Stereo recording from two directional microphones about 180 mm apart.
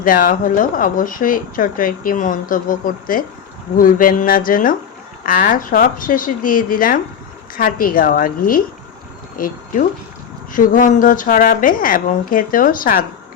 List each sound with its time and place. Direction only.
0.0 s speech: 50° left (ahead or behind)